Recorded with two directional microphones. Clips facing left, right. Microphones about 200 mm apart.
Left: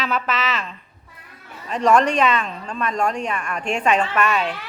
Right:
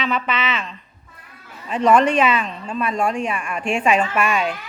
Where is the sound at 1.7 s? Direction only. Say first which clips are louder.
Right 1 dB; 5° right (ahead or behind).